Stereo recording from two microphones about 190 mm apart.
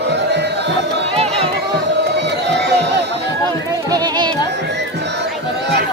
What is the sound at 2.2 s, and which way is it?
Crowd, 65° right (ahead or behind).